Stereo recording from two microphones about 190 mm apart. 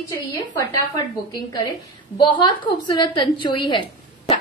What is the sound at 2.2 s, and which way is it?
A woman's voice, 25° left (ahead or behind).